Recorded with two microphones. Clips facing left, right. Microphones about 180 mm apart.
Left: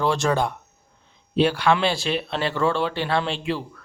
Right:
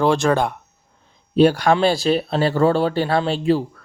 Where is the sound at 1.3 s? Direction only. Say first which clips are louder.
Right 5 dB; 40° right (ahead or behind).